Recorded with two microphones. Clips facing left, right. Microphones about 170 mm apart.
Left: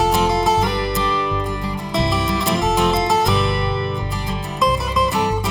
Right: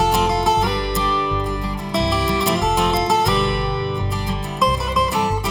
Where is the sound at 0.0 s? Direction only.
Centre (ahead or behind).